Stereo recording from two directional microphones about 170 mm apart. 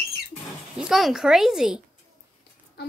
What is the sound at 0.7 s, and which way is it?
Speech, centre (ahead or behind).